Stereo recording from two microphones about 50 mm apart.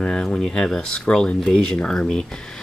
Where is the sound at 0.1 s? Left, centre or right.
Centre.